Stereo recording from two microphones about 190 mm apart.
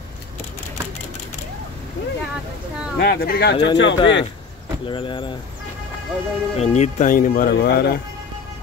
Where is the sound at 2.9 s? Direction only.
55° left (ahead or behind).